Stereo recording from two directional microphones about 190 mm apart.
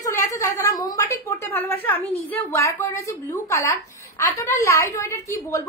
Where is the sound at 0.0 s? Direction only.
15° left (ahead or behind).